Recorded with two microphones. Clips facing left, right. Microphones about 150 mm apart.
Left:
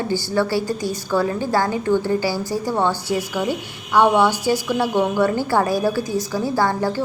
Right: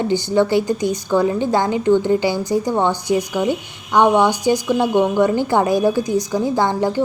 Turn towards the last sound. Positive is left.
turn(degrees=-20)  # may be behind; listen again after turning